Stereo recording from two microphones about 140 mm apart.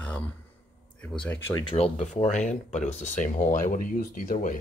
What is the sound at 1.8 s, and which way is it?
Speech, 50° left (ahead or behind).